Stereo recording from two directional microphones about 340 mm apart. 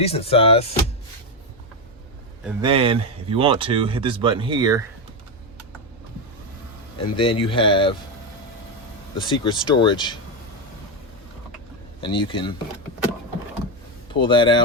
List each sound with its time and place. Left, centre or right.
0.0 s speech: centre
2.4 s speech: centre
2.6 s speech: centre
7.2 s speech: centre
9.1 s speech: centre
11.9 s speech: centre
14.1 s speech: centre